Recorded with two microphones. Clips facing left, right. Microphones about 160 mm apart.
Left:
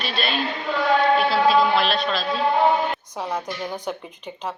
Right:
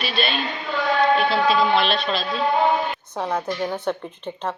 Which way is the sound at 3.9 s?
5° left (ahead or behind).